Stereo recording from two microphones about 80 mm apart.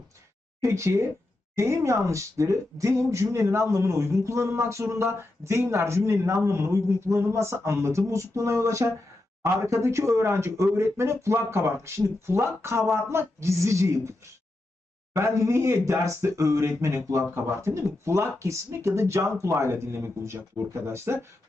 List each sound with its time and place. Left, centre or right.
0.6 s speech: right
15.1 s speech: right